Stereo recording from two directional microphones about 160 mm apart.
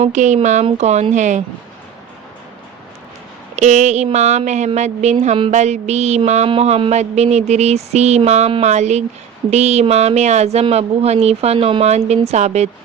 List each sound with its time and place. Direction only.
0.0 s mantra: 50° right (ahead or behind)
3.5 s mantra: 45° right (ahead or behind)